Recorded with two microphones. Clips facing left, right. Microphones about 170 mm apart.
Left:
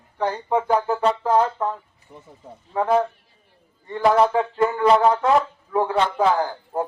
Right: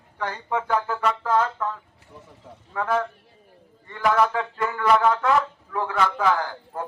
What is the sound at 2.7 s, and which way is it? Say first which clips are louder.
A man's voice: left 5 dB; 25° left (ahead or behind).